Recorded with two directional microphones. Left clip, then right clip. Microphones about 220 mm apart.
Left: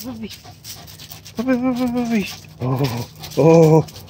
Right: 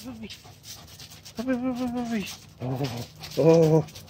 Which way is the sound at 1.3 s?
20° left (ahead or behind).